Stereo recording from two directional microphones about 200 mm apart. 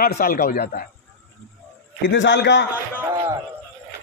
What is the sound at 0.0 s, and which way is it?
Speech, 45° left (ahead or behind).